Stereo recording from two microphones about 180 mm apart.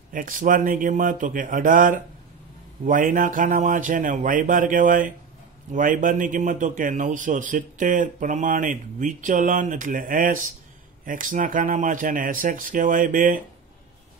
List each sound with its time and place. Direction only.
0.1 s speech: 50° right (ahead or behind)